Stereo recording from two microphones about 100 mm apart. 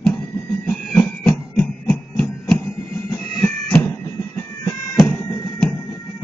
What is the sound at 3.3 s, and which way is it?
Bagpipes, 15° left (ahead or behind).